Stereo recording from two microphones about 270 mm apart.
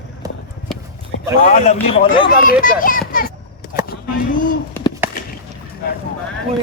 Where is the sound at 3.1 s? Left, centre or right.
Left.